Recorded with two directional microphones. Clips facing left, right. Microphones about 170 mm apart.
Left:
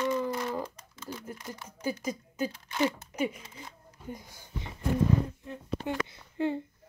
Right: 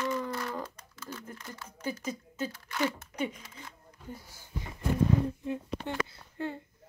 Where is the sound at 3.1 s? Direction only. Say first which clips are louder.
Left 3 dB; 10° left (ahead or behind).